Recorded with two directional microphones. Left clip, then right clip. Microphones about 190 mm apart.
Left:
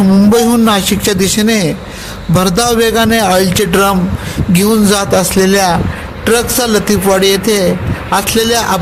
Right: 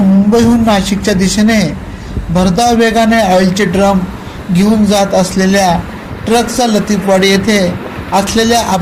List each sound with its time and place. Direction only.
0.3 s a man's voice: 45° left (ahead or behind)